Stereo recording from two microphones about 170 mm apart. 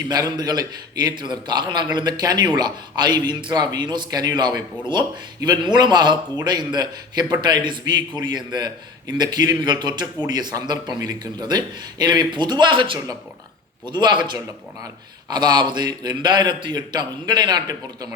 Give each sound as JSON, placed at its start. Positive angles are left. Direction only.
{"t": 0.1, "sound": "a man's voice", "side_deg": -25}
{"t": 15.3, "sound": "a man's voice", "side_deg": -25}